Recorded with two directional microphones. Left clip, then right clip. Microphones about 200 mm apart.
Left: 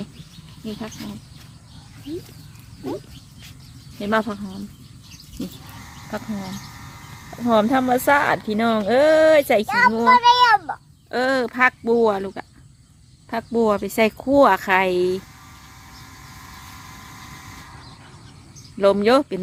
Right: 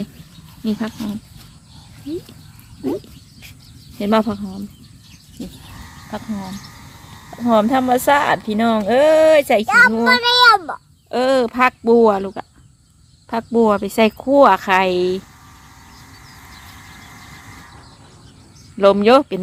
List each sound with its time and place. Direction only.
0.6 s speech: 30° right (ahead or behind)
4.0 s speech: 20° right (ahead or behind)
6.1 s speech: centre (ahead or behind)
9.6 s a child's voice: 45° right (ahead or behind)
10.1 s a sound: 50° right (ahead or behind)
11.1 s speech: 10° right (ahead or behind)
18.8 s speech: 5° right (ahead or behind)